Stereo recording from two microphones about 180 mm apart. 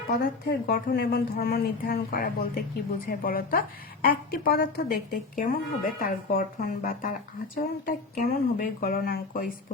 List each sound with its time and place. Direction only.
0.1 s a woman's voice: 60° left (ahead or behind)